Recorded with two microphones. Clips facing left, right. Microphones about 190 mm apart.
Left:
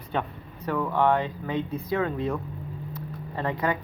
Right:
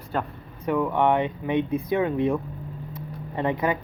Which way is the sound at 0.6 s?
15° right (ahead or behind).